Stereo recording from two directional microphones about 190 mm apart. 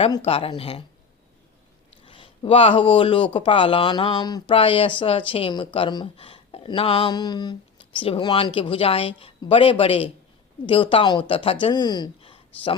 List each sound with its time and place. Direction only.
0.0 s speech: 30° left (ahead or behind)
2.0 s speech: 25° left (ahead or behind)